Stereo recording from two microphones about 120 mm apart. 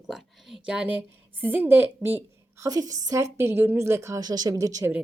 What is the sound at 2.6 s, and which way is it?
A woman's voice, 30° right (ahead or behind).